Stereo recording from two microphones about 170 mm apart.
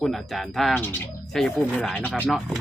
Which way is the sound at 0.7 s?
10° left (ahead or behind).